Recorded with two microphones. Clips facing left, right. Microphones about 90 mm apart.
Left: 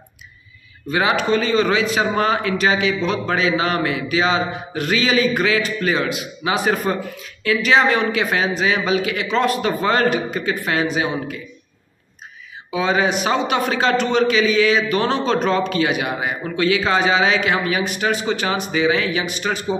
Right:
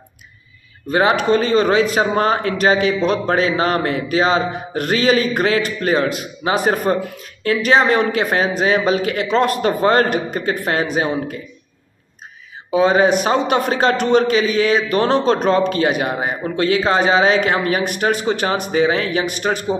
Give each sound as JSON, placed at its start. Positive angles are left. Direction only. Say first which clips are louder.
{"t": 0.8, "sound": "a man's voice", "louder": "right 3 dB", "side_deg": -40}
{"t": 12.7, "sound": "a man's voice", "louder": "right 5 dB", "side_deg": -40}